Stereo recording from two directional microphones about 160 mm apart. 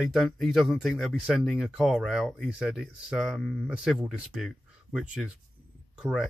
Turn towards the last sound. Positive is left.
turn(degrees=-5)  # may be behind; listen again after turning